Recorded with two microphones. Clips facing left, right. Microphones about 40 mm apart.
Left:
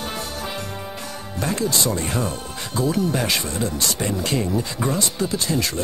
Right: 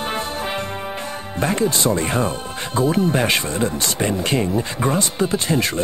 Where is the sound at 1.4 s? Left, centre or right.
Right.